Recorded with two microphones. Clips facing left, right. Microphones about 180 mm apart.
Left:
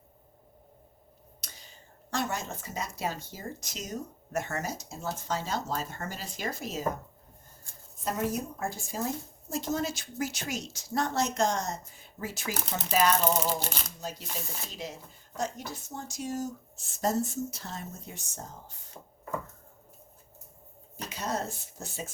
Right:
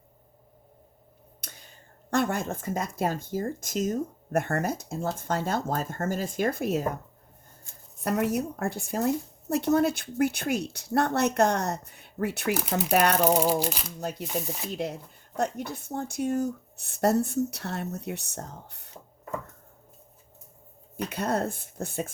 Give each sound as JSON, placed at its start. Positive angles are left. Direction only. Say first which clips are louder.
{"t": 1.4, "sound": "a woman's voice", "louder": "right 4 dB", "side_deg": -55}
{"t": 8.0, "sound": "a woman's voice", "louder": "right 5 dB", "side_deg": -65}
{"t": 20.9, "sound": "a woman's voice", "louder": "right 6 dB", "side_deg": -60}